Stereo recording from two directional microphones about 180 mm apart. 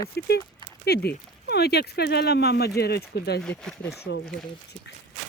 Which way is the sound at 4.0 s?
70° left (ahead or behind).